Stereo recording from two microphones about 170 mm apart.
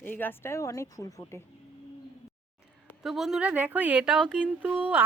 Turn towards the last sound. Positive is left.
turn(degrees=-10)  # may be behind; listen again after turning